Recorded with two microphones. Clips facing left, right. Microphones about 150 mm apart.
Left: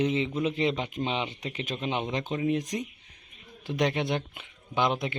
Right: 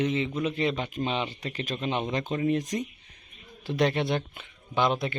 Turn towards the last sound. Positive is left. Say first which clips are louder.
# right 1 dB
turn(degrees=20)  # may be behind; listen again after turning